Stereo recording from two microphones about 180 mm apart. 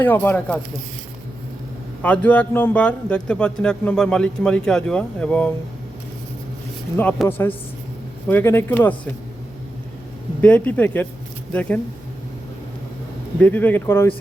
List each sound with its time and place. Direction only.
0.0 s speech: 10° left (ahead or behind)
2.0 s a man's voice: 10° left (ahead or behind)
6.9 s speech: 5° left (ahead or behind)
10.4 s speech: 10° left (ahead or behind)
13.4 s speech: 10° left (ahead or behind)